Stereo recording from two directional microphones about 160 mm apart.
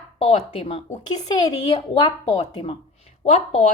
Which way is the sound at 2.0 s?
35° left (ahead or behind).